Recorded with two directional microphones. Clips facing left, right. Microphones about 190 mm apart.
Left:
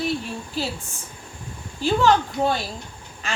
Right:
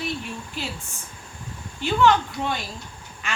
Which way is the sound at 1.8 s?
40° left (ahead or behind).